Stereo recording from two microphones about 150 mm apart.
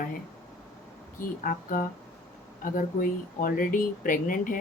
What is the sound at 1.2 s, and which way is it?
Speech, 65° left (ahead or behind).